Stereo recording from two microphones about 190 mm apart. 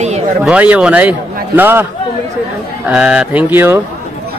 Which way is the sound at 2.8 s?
5° right (ahead or behind).